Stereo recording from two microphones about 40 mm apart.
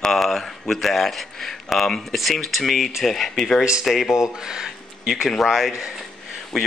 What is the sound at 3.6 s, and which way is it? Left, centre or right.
Speech, centre.